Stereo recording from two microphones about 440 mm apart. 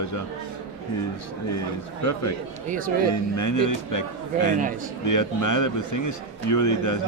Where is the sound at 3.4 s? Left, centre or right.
Left.